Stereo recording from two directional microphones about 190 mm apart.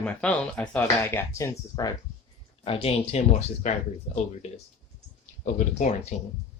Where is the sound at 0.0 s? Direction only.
5° left (ahead or behind).